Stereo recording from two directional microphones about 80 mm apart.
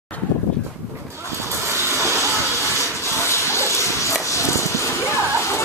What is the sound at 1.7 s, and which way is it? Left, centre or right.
Vehicle, right.